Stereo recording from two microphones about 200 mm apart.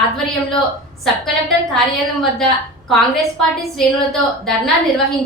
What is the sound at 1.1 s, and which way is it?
Speech, centre (ahead or behind).